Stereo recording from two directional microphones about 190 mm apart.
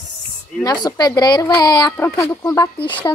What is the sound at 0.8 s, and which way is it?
Speech, 20° left (ahead or behind).